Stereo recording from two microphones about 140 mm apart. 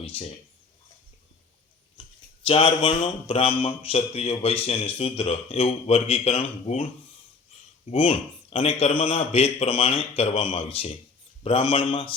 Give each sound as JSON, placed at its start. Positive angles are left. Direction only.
{"t": 0.0, "sound": "speech", "side_deg": 45}
{"t": 2.5, "sound": "a man's voice", "side_deg": 40}
{"t": 7.9, "sound": "a man's voice", "side_deg": 45}